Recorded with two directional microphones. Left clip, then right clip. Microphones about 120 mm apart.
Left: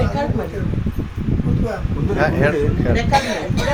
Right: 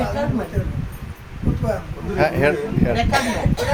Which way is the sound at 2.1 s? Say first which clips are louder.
Even; 30° right (ahead or behind).